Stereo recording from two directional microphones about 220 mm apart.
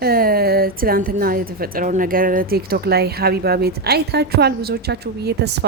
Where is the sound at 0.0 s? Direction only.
45° right (ahead or behind).